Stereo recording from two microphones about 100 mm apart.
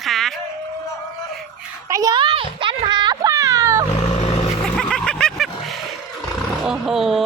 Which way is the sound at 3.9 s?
90° left.